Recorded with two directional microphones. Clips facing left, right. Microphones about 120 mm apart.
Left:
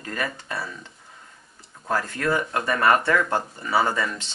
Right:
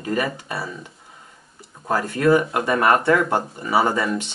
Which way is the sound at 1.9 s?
15° right (ahead or behind).